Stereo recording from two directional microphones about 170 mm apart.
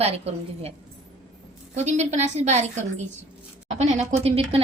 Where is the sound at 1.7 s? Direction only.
40° right (ahead or behind).